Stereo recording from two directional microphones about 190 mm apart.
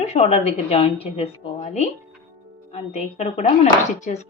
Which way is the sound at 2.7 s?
35° left (ahead or behind).